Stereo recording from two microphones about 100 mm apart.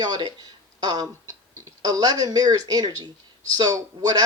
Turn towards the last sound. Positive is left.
turn(degrees=-40)  # may be behind; listen again after turning